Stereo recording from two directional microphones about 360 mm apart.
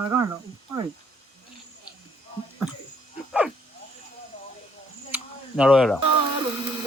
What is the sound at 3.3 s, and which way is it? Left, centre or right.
Dog, centre.